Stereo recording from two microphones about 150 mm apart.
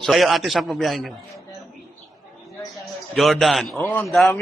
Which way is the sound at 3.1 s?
Centre (ahead or behind).